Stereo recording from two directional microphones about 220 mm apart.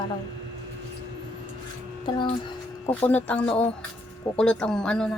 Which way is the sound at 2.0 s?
20° left (ahead or behind).